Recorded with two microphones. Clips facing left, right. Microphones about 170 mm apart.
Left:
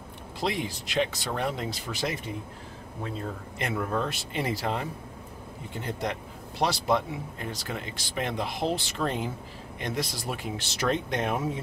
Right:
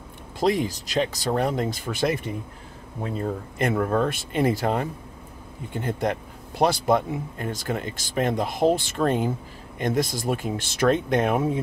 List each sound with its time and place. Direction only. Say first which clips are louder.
0.4 s speech: right 8 dB; 40° right (ahead or behind)
3.5 s speech: right 7 dB; 50° right (ahead or behind)